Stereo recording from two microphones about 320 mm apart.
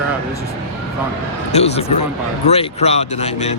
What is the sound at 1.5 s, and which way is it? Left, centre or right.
Speech, centre.